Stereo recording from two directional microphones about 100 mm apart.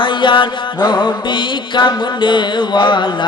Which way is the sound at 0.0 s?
55° left (ahead or behind).